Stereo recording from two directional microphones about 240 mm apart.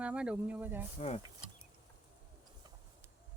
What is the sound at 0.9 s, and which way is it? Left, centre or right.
Speech, left.